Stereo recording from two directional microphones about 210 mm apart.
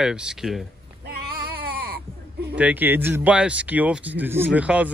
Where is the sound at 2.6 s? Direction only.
10° right (ahead or behind).